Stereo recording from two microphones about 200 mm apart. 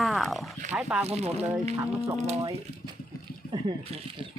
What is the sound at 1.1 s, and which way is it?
Speech, 30° right (ahead or behind).